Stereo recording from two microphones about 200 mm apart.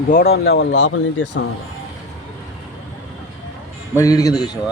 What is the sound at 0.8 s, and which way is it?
Speech, 65° left (ahead or behind).